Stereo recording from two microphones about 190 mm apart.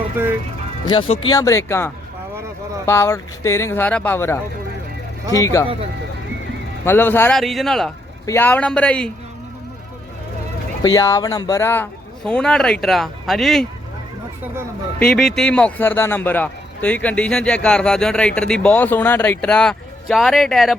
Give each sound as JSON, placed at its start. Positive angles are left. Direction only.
{"t": 0.9, "sound": "speech", "side_deg": 30}
{"t": 1.3, "sound": "a man's voice", "side_deg": 15}
{"t": 6.8, "sound": "a man's voice", "side_deg": 10}
{"t": 7.3, "sound": "a man's voice", "side_deg": 0}
{"t": 10.8, "sound": "a man's voice", "side_deg": 20}
{"t": 15.0, "sound": "a man's voice", "side_deg": 5}